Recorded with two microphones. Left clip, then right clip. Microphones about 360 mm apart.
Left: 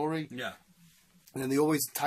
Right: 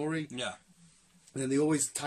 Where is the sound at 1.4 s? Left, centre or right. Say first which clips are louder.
Left 1 dB; centre.